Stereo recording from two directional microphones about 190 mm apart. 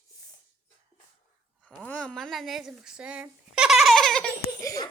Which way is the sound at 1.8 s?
5° left (ahead or behind).